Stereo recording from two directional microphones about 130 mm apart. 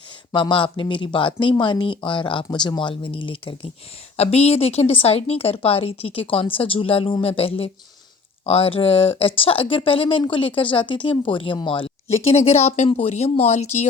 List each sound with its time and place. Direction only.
0.3 s speech: 40° left (ahead or behind)
4.2 s speech: 55° left (ahead or behind)